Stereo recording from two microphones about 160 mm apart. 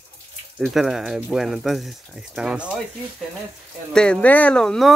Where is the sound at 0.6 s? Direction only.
Centre (ahead or behind).